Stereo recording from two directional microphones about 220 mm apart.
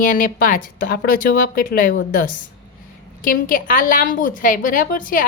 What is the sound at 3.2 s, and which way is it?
A woman's voice, 40° left (ahead or behind).